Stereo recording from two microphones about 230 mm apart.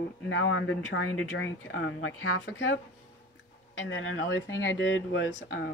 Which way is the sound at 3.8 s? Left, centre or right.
Left.